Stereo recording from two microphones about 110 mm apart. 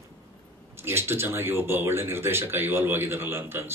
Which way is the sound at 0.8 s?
20° right (ahead or behind).